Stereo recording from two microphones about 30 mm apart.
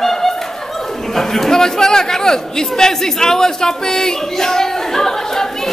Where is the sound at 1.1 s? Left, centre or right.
Centre.